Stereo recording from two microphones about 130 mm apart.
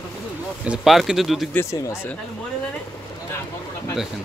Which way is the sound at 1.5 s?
20° left (ahead or behind).